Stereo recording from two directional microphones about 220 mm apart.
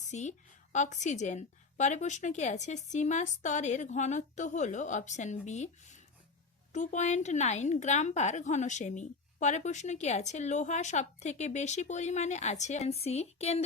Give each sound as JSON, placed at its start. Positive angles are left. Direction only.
{"t": 0.0, "sound": "a woman's voice", "side_deg": 30}